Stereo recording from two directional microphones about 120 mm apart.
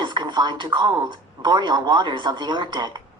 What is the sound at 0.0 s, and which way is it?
Speech, 40° right (ahead or behind).